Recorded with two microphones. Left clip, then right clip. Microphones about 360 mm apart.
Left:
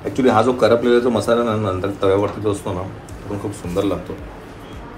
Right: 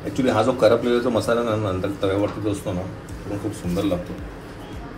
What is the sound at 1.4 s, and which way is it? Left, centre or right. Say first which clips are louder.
Speech: left 3 dB; left.